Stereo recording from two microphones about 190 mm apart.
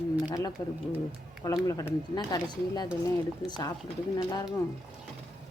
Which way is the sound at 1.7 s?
20° left (ahead or behind).